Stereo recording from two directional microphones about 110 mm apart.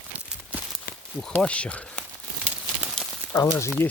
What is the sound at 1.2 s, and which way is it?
Speech, 10° left (ahead or behind).